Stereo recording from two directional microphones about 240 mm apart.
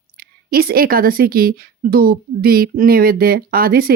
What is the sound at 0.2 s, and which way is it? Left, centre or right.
A woman's voice, right.